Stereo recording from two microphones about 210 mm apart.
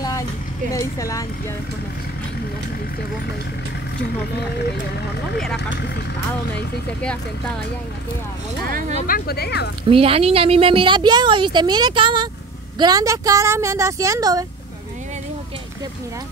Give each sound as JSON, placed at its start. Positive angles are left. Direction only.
{"t": 0.7, "sound": "speech", "side_deg": 15}
{"t": 8.6, "sound": "speech", "side_deg": -40}
{"t": 9.0, "sound": "speech", "side_deg": 45}
{"t": 9.8, "sound": "a woman's voice", "side_deg": -25}